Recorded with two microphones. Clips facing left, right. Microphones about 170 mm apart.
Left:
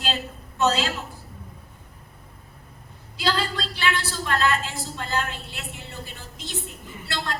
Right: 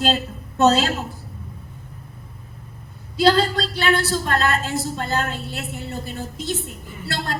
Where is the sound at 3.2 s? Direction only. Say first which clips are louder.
Right 9 dB; 40° right (ahead or behind).